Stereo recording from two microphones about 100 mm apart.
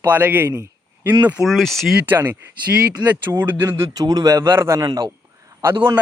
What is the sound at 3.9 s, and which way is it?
Speech, 40° right (ahead or behind).